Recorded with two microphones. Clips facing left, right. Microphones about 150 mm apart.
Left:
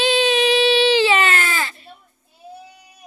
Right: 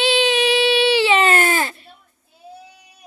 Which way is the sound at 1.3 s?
45° right (ahead or behind).